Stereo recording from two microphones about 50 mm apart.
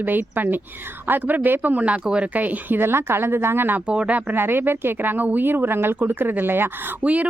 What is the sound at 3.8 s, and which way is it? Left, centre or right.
Speech, right.